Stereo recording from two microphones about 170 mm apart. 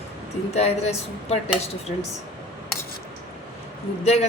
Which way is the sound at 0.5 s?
40° left (ahead or behind).